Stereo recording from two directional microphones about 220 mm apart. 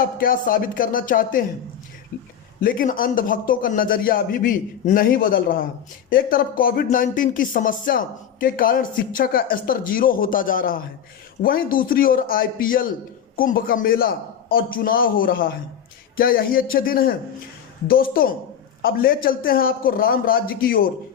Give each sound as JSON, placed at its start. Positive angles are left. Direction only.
{"t": 0.0, "sound": "speech", "side_deg": 40}
{"t": 2.6, "sound": "speech", "side_deg": 40}